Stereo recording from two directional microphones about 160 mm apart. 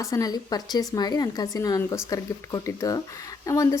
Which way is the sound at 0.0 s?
20° left (ahead or behind).